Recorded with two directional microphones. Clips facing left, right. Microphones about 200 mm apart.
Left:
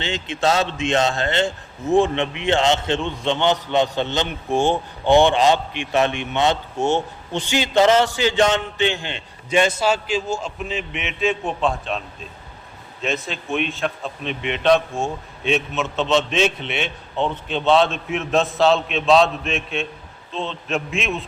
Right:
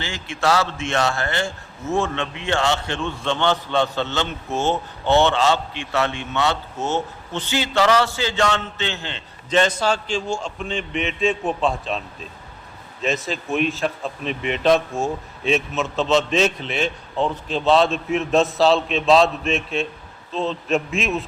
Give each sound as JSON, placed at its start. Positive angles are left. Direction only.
{"t": 0.0, "sound": "a man's voice", "side_deg": 20}